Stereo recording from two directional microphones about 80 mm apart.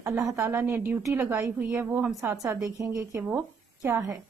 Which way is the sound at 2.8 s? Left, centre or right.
Right.